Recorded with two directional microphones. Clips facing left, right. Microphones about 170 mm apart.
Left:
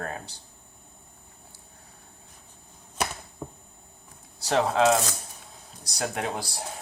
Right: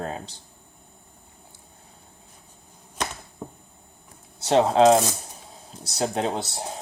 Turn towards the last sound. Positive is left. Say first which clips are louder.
# right 4 dB
turn(degrees=-25)  # may be behind; listen again after turning